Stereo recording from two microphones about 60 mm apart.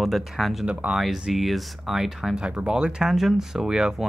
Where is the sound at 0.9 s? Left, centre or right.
Centre.